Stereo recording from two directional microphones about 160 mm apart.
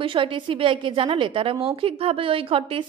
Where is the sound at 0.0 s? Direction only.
30° right (ahead or behind).